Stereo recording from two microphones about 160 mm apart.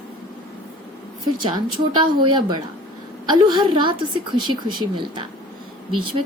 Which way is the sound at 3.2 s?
25° right (ahead or behind).